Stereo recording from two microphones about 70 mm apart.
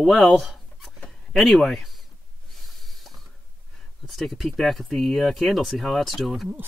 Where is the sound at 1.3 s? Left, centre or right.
Centre.